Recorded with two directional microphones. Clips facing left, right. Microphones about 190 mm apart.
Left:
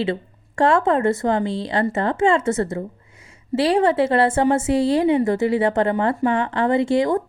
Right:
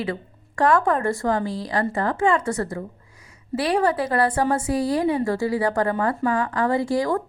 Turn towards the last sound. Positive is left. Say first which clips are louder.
# left 4 dB
turn(degrees=25)  # may be behind; listen again after turning